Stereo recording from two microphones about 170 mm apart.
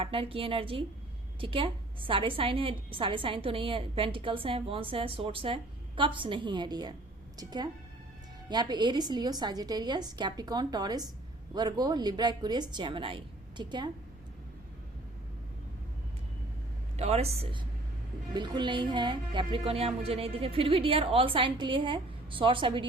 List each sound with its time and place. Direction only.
0.0 s a woman's voice: 30° right (ahead or behind)
17.0 s speech: 40° right (ahead or behind)